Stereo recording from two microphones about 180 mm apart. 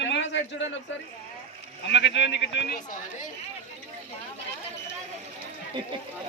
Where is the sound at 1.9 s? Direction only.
75° left (ahead or behind).